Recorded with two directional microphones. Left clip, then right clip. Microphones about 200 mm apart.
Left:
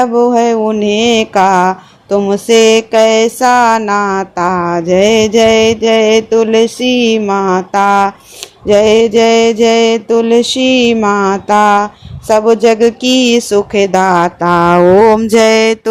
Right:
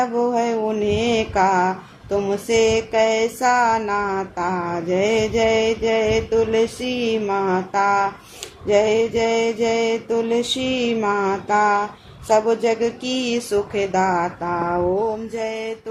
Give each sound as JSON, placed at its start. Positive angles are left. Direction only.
{"t": 0.0, "sound": "mantra", "side_deg": 40}